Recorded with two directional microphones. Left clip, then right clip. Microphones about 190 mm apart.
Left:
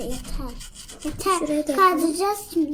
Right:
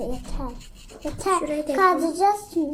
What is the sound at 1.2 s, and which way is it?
A child's voice, 50° left (ahead or behind).